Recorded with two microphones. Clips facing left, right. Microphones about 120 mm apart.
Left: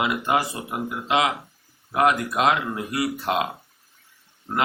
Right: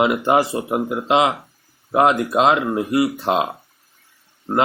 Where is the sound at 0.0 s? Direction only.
30° right (ahead or behind).